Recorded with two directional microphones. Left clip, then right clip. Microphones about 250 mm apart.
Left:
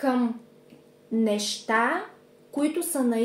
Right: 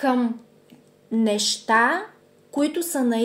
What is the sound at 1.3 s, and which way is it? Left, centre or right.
Speech, right.